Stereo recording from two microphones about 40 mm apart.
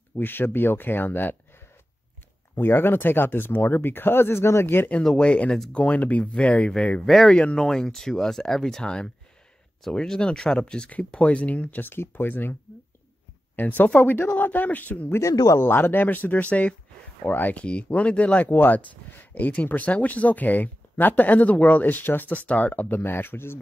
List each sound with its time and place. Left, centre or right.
0.1 s speech: left
2.5 s speech: left
5.1 s speech: left
5.9 s speech: left
6.3 s speech: left
10.9 s speech: left
11.9 s speech: left
13.6 s speech: left
15.6 s speech: left
17.2 s speech: left
17.6 s speech: left
18.5 s speech: left
22.3 s speech: left
22.8 s speech: left